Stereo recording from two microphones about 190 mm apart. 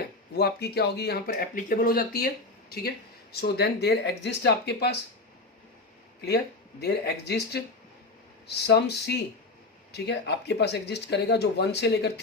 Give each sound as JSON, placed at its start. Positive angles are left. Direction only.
{"t": 0.3, "sound": "speech", "side_deg": 60}
{"t": 6.2, "sound": "speech", "side_deg": 60}